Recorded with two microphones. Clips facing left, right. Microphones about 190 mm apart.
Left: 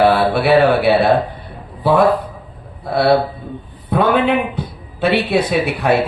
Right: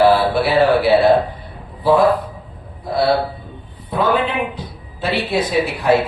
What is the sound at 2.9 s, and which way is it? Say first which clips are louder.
A man's voice: left 3 dB; 60° left (ahead or behind).